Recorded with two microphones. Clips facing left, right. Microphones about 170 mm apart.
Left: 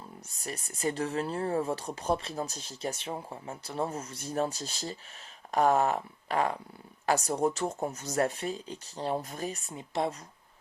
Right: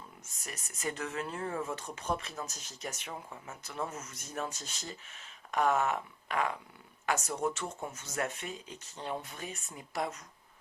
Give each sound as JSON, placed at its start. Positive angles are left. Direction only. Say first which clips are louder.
{"t": 0.4, "sound": "speech", "louder": "left 6 dB", "side_deg": 30}
{"t": 9.7, "sound": "speech", "louder": "left 4 dB", "side_deg": 25}